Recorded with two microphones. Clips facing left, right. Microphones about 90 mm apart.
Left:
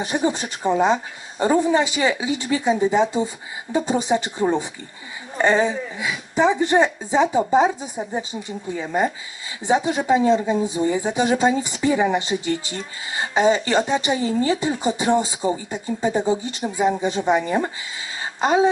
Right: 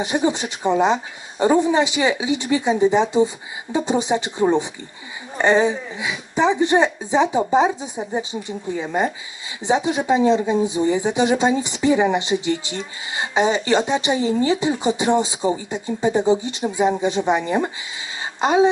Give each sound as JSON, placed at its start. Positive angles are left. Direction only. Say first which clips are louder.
{"t": 0.0, "sound": "speech", "louder": "right 2 dB", "side_deg": -15}